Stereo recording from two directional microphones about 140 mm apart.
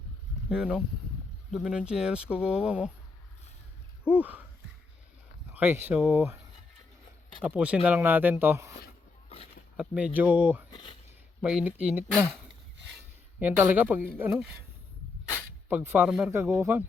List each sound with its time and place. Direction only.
0.5 s speech: 5° right (ahead or behind)
4.0 s a sound: 10° right (ahead or behind)
5.5 s speech: 15° right (ahead or behind)
7.4 s speech: 10° right (ahead or behind)
9.7 s speech: 10° right (ahead or behind)
10.7 s speech: 30° left (ahead or behind)
11.4 s speech: 10° right (ahead or behind)
13.4 s speech: 10° right (ahead or behind)
15.7 s speech: 15° right (ahead or behind)
16.3 s speech: 15° right (ahead or behind)